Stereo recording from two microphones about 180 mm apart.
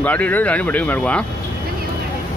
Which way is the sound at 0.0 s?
10° left (ahead or behind).